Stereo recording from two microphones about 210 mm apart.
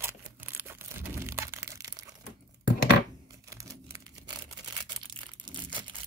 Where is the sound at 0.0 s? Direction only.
10° right (ahead or behind).